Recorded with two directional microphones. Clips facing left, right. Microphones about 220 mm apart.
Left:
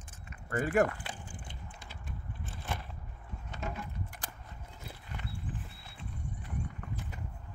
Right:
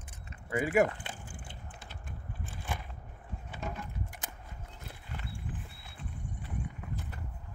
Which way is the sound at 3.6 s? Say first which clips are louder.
Even; centre (ahead or behind).